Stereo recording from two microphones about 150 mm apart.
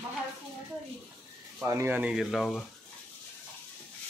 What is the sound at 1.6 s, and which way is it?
Speech, 20° right (ahead or behind).